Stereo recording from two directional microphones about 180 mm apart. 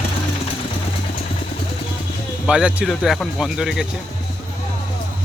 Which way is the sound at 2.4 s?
5° right (ahead or behind).